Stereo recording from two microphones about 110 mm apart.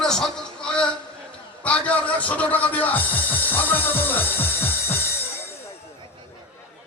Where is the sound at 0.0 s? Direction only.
5° left (ahead or behind).